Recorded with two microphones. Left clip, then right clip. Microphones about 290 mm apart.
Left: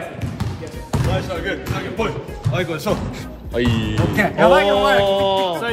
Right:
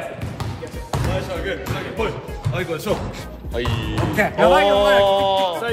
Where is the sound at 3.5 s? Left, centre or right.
Left.